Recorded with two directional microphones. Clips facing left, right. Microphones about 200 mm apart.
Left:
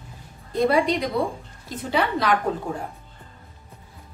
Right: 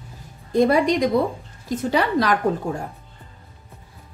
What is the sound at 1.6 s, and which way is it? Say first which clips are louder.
Speech: right 3 dB; 40° right (ahead or behind).